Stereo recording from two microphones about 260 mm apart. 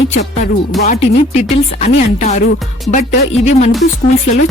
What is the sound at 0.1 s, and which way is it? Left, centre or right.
Speech, left.